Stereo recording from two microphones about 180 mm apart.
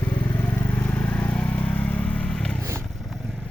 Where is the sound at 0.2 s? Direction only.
10° left (ahead or behind).